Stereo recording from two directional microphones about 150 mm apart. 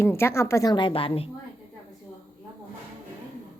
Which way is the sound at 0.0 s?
15° left (ahead or behind).